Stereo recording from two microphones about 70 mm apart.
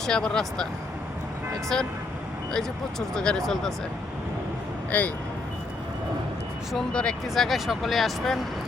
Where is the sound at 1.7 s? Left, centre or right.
Centre.